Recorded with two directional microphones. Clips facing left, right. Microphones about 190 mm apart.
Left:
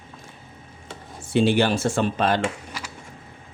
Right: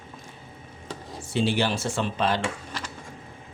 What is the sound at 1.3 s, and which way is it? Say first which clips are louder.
Speech: left 5 dB; 55° left (ahead or behind).